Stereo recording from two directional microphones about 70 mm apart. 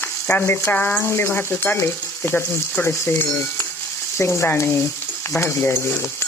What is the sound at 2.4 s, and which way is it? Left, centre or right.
Speech, left.